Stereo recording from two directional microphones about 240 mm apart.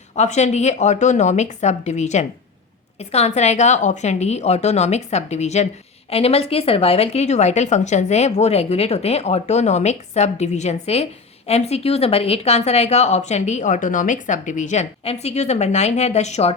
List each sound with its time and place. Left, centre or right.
0.2 s speech: left